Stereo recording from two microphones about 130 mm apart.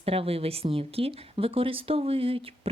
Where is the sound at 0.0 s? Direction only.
50° right (ahead or behind).